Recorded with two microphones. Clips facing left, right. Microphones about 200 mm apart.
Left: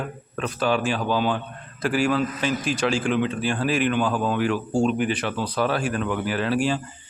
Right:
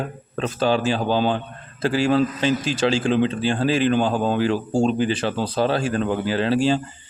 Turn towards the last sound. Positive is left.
turn(degrees=-30)  # may be behind; listen again after turning